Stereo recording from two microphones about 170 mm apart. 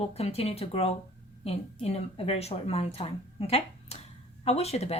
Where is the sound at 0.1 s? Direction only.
35° left (ahead or behind).